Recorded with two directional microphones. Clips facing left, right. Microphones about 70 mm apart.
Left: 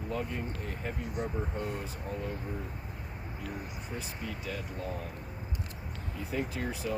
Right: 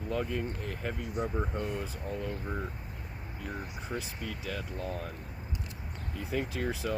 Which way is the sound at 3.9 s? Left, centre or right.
Right.